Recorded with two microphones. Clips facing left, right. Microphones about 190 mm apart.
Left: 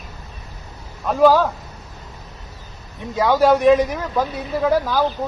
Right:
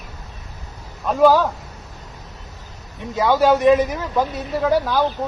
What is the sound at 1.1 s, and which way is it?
Speech, centre (ahead or behind).